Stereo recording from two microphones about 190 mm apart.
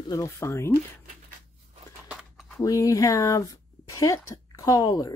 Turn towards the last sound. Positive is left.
turn(degrees=20)  # may be behind; listen again after turning